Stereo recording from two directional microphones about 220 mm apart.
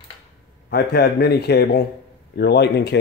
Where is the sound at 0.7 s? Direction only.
45° left (ahead or behind).